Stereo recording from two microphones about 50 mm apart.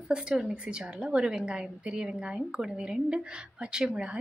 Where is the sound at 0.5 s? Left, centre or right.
Right.